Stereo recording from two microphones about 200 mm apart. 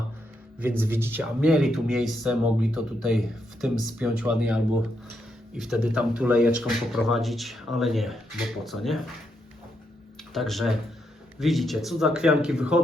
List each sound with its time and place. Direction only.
0.6 s speech: 10° right (ahead or behind)
10.3 s speech: centre (ahead or behind)